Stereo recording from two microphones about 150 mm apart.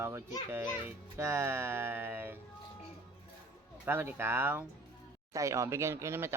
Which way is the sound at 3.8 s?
15° right (ahead or behind).